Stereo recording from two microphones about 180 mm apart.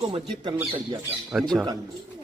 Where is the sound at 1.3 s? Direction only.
Centre (ahead or behind).